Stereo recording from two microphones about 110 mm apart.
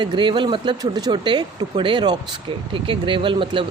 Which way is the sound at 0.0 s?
45° right (ahead or behind).